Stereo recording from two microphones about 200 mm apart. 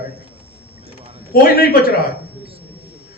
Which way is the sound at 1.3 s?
50° left (ahead or behind).